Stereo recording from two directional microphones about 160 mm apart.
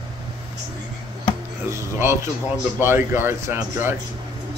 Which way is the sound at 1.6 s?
15° right (ahead or behind).